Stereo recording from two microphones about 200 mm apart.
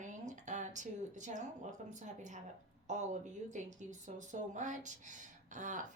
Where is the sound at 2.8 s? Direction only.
35° right (ahead or behind).